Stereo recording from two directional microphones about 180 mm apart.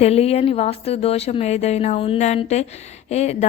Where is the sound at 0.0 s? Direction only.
35° left (ahead or behind).